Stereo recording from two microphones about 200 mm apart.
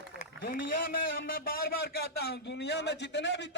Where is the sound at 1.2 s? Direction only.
45° left (ahead or behind).